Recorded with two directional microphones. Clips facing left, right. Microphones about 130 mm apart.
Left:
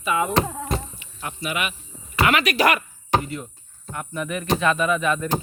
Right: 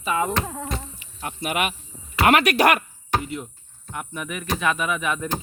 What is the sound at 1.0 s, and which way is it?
Speech, 50° right (ahead or behind).